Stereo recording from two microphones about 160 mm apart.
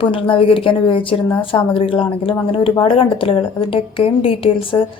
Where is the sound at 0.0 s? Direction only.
35° left (ahead or behind).